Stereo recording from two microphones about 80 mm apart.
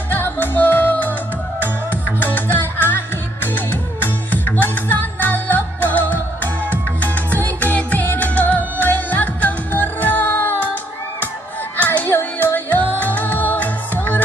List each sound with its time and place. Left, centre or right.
0.1 s music: left
11.8 s music: left